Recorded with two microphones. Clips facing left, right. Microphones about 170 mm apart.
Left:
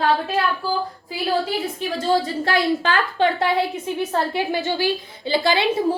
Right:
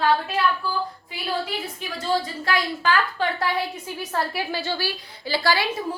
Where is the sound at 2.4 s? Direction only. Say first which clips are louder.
Left 2 dB; 30° left (ahead or behind).